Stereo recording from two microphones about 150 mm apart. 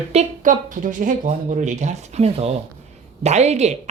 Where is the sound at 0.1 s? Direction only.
55° right (ahead or behind).